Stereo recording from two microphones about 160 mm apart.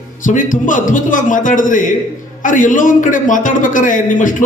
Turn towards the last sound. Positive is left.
turn(degrees=55)  # may be behind; listen again after turning